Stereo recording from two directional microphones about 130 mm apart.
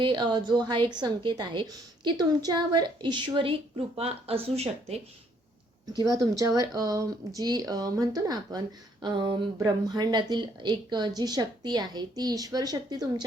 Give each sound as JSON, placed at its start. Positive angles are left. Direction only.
{"t": 0.0, "sound": "speech", "side_deg": -35}
{"t": 3.9, "sound": "speech", "side_deg": -50}
{"t": 6.3, "sound": "speech", "side_deg": -25}